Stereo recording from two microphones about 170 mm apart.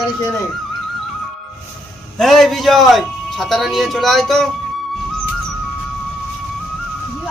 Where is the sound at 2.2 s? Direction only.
Centre (ahead or behind).